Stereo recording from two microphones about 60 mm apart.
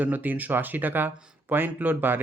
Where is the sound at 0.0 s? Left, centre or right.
Right.